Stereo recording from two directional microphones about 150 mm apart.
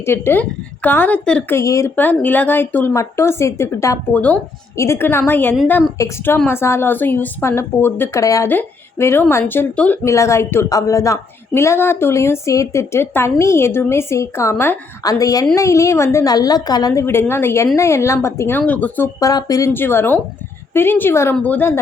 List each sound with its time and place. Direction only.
0.0 s a woman's voice: 15° left (ahead or behind)
19.2 s a woman's voice: 25° left (ahead or behind)